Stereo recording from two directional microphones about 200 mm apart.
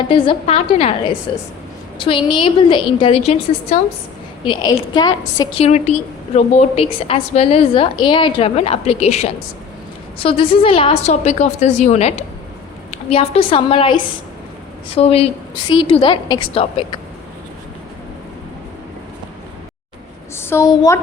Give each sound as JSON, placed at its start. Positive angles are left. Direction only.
{"t": 0.1, "sound": "a woman's voice", "side_deg": 30}
{"t": 5.6, "sound": "a woman's voice", "side_deg": 35}
{"t": 20.3, "sound": "a woman's voice", "side_deg": 10}